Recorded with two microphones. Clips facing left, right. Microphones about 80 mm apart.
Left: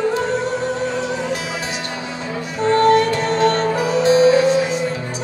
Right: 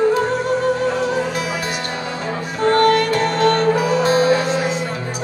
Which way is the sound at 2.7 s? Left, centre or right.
Right.